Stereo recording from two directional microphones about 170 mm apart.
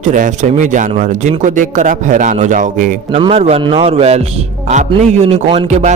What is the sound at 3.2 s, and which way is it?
A man's voice, 35° right (ahead or behind).